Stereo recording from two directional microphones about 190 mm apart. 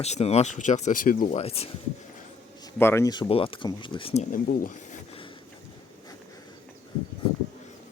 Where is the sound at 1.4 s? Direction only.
30° left (ahead or behind).